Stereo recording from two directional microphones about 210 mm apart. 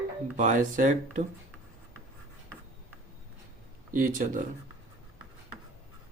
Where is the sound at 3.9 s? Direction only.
40° right (ahead or behind).